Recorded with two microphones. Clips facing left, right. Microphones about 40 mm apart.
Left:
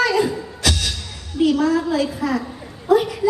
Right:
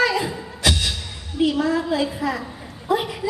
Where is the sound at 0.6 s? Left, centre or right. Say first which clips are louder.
Right 1 dB; centre.